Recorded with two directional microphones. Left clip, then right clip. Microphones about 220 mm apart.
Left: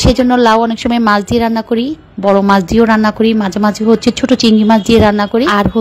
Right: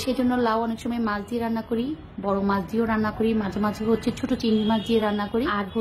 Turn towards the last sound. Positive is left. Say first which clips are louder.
# left 14 dB
turn(degrees=40)  # may be behind; listen again after turning